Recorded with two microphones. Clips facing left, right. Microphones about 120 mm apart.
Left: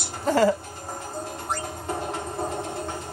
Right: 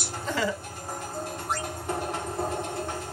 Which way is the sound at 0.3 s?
45° left (ahead or behind).